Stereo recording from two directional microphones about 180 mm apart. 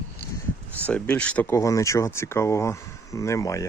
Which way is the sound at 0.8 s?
5° left (ahead or behind).